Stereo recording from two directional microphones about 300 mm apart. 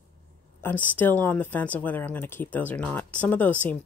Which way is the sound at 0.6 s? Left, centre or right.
Centre.